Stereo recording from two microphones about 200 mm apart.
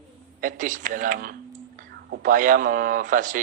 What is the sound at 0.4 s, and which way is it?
Speech, 40° right (ahead or behind).